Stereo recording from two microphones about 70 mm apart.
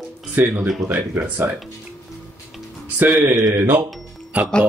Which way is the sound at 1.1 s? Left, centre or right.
Right.